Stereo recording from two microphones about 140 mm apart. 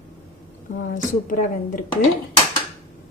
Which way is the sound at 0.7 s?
65° left (ahead or behind).